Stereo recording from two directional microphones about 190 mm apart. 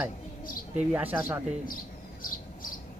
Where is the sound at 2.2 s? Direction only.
45° left (ahead or behind).